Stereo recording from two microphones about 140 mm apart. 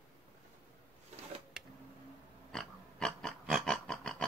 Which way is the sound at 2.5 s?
5° left (ahead or behind).